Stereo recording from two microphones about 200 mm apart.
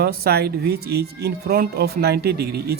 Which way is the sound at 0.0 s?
50° right (ahead or behind).